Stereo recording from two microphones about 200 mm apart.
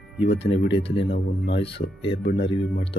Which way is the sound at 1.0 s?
55° left (ahead or behind).